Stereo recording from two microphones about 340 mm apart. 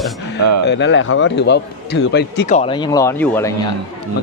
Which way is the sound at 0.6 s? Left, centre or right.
Left.